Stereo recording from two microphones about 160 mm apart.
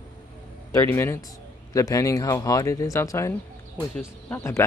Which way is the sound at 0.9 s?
15° left (ahead or behind).